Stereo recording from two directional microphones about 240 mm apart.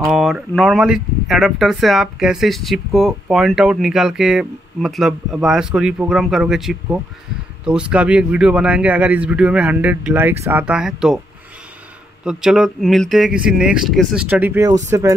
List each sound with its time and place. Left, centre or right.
0.1 s speech: centre
12.3 s speech: centre